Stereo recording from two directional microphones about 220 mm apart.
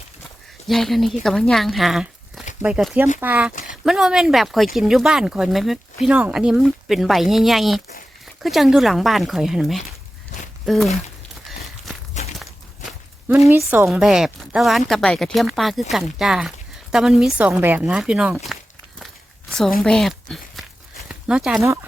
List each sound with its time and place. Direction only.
0.7 s a woman's voice: centre (ahead or behind)
3.5 s a sound: 35° left (ahead or behind)
3.8 s speech: centre (ahead or behind)
11.5 s walk: centre (ahead or behind)
12.1 s walk: 30° left (ahead or behind)
13.2 s a woman's voice: 10° right (ahead or behind)